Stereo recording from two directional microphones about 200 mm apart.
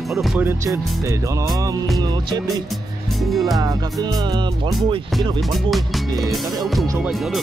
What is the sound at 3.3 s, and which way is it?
Speech, centre (ahead or behind).